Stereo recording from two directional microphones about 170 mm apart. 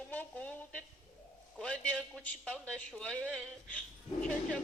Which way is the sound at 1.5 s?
5° left (ahead or behind).